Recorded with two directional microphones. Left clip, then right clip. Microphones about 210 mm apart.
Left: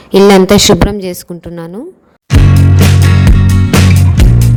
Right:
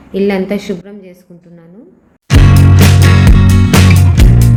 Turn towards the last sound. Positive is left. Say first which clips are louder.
# even
turn(degrees=0)  # may be behind; listen again after turning